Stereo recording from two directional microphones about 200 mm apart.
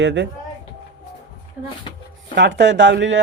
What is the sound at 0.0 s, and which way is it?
Speech, 65° right (ahead or behind).